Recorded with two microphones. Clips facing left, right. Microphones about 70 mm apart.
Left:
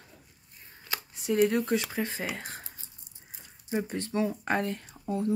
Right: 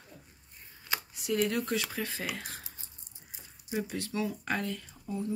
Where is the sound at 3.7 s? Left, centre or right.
Left.